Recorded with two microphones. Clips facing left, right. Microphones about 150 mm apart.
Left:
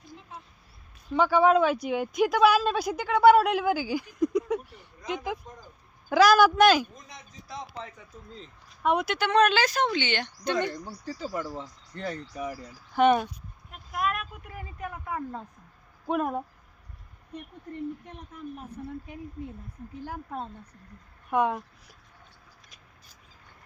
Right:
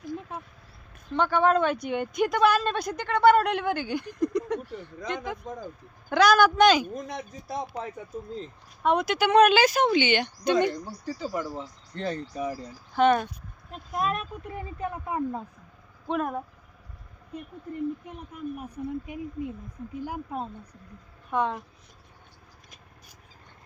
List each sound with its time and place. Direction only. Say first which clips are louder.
0.1 s a sound: right 10 dB; 55° right (ahead or behind)
1.1 s speech: left 2 dB; 5° left (ahead or behind)
4.6 s a sound: right 12 dB; 90° right
5.0 s speech: left 1 dB; 5° left (ahead or behind)
6.9 s speech: right 13 dB; 65° right (ahead or behind)
8.3 s speech: right 9 dB; centre (ahead or behind)
9.1 s speech: right 6 dB; 10° right (ahead or behind)
11.9 s speech: right 3 dB; 25° right (ahead or behind)
13.0 s speech: even; 10° left (ahead or behind)
13.7 s speech: right 2 dB; 25° right (ahead or behind)
16.0 s speech: left 1 dB; 10° left (ahead or behind)
18.5 s speech: right 5 dB; 10° right (ahead or behind)
21.2 s speech: left 2 dB; 10° left (ahead or behind)